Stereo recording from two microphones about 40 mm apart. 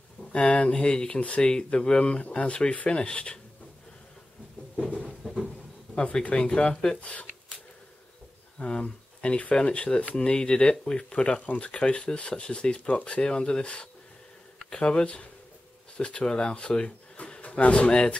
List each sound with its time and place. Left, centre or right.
0.2 s speech: left
5.0 s a sound: centre
6.3 s speech: left
8.5 s speech: left
17.2 s speech: left